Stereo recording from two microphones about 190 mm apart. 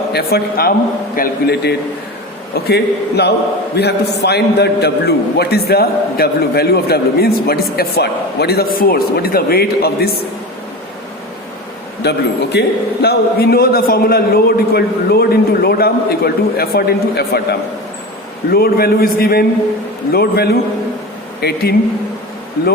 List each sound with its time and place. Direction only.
0.1 s a man's voice: 55° left (ahead or behind)
12.0 s a man's voice: 60° left (ahead or behind)